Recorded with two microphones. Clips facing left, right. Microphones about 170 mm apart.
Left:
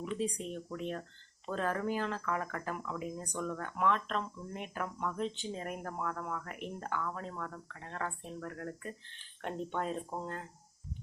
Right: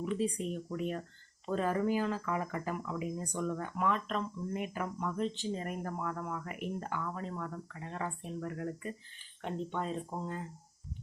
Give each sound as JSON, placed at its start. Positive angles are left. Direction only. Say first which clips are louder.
{"t": 0.2, "sound": "speech", "louder": "right 2 dB", "side_deg": -5}